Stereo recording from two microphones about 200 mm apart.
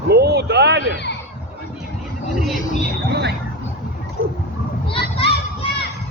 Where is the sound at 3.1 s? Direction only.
55° right (ahead or behind).